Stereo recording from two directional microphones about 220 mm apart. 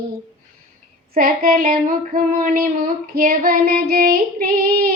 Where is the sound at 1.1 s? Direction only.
40° right (ahead or behind).